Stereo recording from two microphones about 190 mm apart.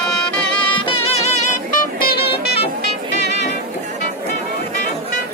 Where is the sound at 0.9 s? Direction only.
35° left (ahead or behind).